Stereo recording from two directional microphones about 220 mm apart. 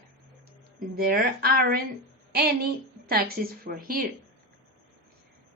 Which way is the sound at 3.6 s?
40° right (ahead or behind).